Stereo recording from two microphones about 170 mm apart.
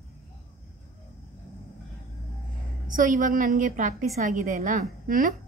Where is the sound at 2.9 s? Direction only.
50° right (ahead or behind).